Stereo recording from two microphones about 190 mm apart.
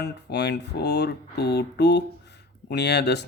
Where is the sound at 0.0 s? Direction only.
60° left (ahead or behind).